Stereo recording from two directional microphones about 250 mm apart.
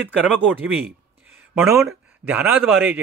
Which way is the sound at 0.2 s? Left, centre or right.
Centre.